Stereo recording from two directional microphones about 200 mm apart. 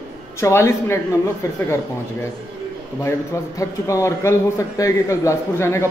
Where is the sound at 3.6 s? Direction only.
15° left (ahead or behind).